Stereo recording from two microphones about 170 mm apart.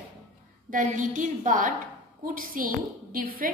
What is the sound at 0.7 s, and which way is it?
A woman's voice, 50° right (ahead or behind).